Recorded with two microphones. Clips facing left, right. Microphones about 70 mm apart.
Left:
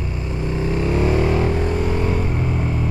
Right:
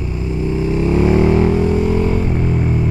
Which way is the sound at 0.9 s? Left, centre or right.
Right.